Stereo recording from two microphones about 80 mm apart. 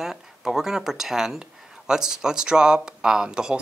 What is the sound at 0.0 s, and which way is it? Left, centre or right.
Speech, centre.